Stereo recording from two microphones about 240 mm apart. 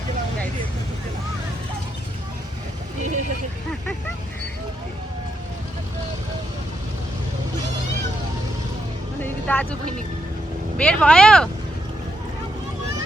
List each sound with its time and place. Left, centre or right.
3.0 s speech: right
9.2 s speech: centre